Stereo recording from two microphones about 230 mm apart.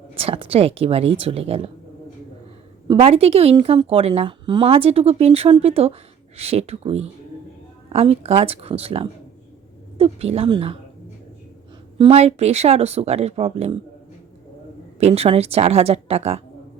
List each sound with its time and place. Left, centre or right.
0.1 s a woman's voice: right
2.8 s a woman's voice: right
11.9 s a woman's voice: right
14.9 s a woman's voice: right